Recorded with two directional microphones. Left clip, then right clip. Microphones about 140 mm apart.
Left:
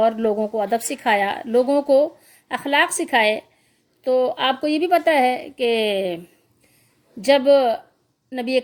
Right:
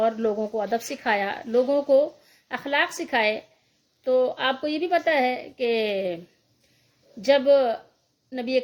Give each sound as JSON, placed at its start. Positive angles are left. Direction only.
{"t": 0.0, "sound": "speech", "side_deg": 30}